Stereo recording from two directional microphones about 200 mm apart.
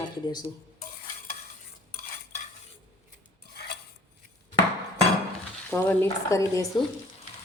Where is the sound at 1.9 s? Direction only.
45° left (ahead or behind).